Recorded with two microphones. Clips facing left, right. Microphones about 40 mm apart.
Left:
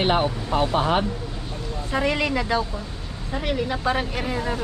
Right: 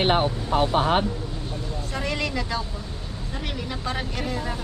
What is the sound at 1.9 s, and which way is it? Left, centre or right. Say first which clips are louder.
Speech: left 6 dB; left.